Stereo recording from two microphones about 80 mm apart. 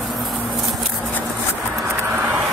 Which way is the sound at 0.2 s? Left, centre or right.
Centre.